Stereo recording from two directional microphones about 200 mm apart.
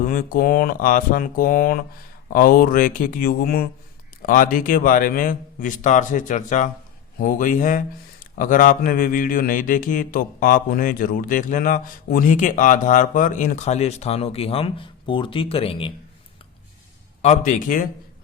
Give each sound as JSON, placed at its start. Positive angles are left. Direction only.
{"t": 0.0, "sound": "a man's voice", "side_deg": 45}
{"t": 17.2, "sound": "speech", "side_deg": 35}